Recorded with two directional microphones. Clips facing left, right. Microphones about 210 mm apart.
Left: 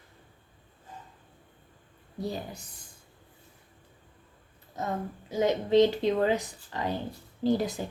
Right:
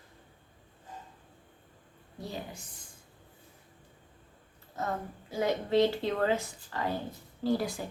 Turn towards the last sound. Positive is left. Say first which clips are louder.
# left 3 dB
turn(degrees=20)  # may be behind; listen again after turning